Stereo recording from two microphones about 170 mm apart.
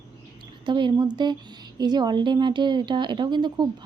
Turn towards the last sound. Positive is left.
turn(degrees=-25)  # may be behind; listen again after turning